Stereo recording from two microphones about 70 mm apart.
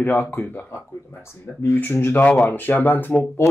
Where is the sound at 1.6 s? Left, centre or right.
Left.